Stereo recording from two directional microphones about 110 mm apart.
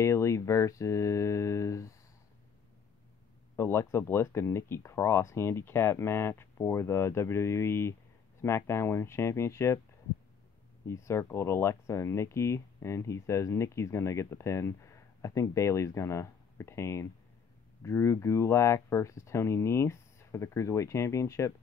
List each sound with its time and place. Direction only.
0.0 s speech: 25° left (ahead or behind)
3.5 s speech: 20° left (ahead or behind)
10.9 s speech: 25° left (ahead or behind)